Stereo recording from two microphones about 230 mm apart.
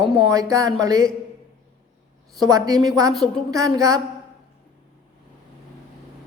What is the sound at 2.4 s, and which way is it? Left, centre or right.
Speech, centre.